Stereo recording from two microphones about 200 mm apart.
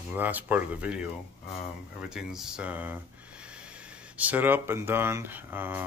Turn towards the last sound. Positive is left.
turn(degrees=-10)  # may be behind; listen again after turning